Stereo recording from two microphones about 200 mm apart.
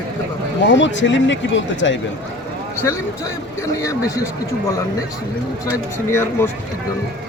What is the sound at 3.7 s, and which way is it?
Speech, 15° left (ahead or behind).